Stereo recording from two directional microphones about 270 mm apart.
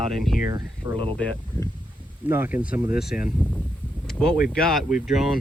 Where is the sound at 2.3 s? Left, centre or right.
Centre.